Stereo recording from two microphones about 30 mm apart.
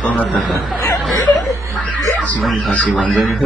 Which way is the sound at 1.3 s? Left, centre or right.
Centre.